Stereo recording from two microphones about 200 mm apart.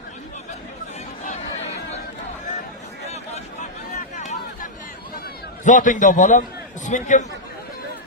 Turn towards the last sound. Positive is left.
turn(degrees=40)  # may be behind; listen again after turning